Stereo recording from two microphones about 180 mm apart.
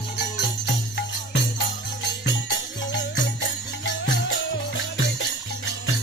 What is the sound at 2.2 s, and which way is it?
Music, 80° left.